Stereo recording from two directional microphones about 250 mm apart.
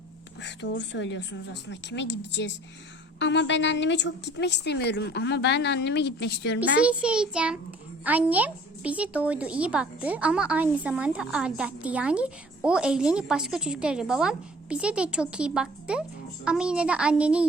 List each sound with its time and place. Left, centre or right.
0.4 s a woman's voice: left
6.7 s speech: centre